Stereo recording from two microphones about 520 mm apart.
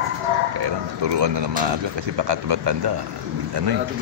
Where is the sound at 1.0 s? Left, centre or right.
Right.